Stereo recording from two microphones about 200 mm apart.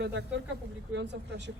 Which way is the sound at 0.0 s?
60° right (ahead or behind).